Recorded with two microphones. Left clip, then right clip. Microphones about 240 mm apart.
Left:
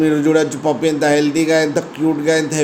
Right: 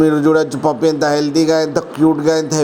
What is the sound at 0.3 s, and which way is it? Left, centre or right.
A man's voice, right.